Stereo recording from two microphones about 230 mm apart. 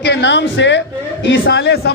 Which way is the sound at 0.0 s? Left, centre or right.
Left.